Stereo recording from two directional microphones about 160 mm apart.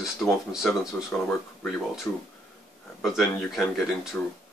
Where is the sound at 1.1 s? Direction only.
10° left (ahead or behind).